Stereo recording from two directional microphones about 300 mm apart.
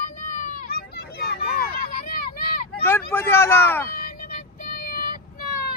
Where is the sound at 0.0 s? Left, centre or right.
Left.